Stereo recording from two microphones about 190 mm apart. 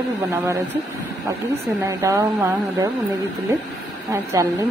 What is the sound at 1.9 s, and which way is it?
Speech, 15° right (ahead or behind).